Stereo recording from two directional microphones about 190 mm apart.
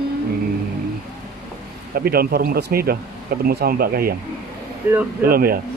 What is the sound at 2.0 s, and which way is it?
Speech, 50° right (ahead or behind).